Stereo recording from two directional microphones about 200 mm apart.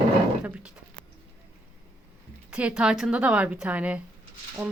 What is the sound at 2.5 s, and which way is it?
Speech, 5° right (ahead or behind).